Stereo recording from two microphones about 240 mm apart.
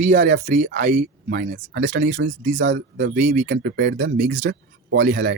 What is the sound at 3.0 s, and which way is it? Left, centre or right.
Speech, right.